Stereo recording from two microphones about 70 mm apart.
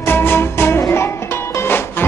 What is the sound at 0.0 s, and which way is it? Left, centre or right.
Music, left.